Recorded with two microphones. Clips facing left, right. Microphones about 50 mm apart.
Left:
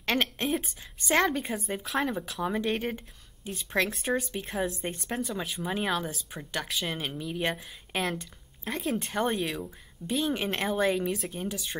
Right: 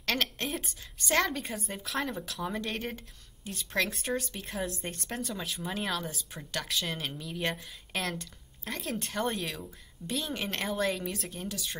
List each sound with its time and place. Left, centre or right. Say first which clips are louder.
0.0 s a woman's voice: left 3 dB; left
9.0 s a woman's voice: left 1 dB; centre